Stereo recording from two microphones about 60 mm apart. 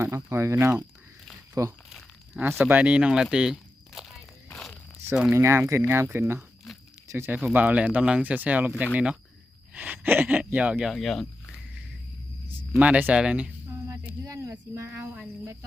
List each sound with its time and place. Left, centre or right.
0.0 s speech: right
1.6 s speech: right
1.9 s a sound: centre
2.4 s speech: right
2.7 s speech: right; by 4.2 s centre
5.3 s speech: right
7.3 s speech: right
9.7 s speech: right
10.9 s speech: centre
12.8 s speech: right
13.7 s a sound: right
14.8 s speech: right